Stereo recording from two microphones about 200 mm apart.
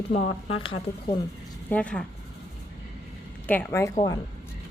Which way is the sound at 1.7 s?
5° left (ahead or behind).